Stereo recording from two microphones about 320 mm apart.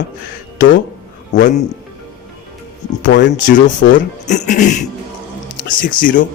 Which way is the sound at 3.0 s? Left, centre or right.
Left.